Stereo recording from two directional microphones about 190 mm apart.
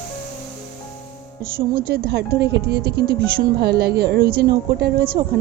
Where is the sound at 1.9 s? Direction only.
55° right (ahead or behind).